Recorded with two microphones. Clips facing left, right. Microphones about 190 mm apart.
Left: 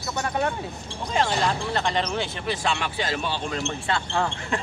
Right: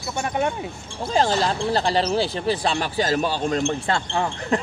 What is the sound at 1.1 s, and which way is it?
Speech, 35° right (ahead or behind).